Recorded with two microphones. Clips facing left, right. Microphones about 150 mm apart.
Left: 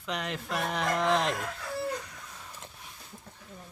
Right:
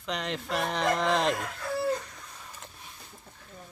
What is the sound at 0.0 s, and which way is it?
Speech, 5° left (ahead or behind).